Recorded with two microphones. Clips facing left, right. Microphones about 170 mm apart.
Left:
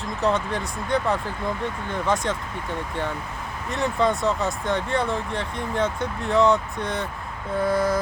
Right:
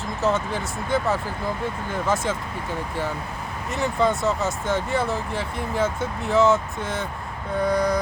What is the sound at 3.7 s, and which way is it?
Speech, centre (ahead or behind).